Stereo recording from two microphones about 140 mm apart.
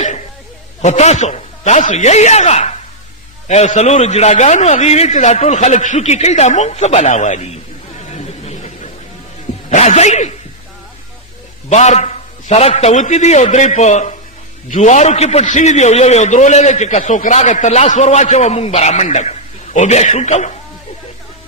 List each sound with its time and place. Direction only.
0.8 s a man's voice: 55° left (ahead or behind)
8.1 s a sound: 50° left (ahead or behind)
9.6 s a man's voice: 55° left (ahead or behind)
11.7 s a man's voice: 55° left (ahead or behind)